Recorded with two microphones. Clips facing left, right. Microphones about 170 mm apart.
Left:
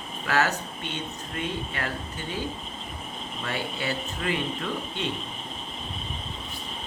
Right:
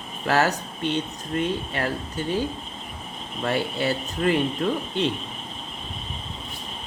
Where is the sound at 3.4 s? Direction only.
45° right (ahead or behind).